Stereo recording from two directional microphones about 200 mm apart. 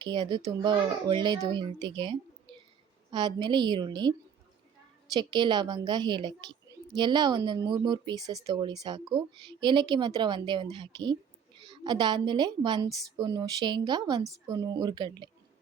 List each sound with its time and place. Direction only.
0.0 s speech: 25° right (ahead or behind)
5.1 s speech: 20° right (ahead or behind)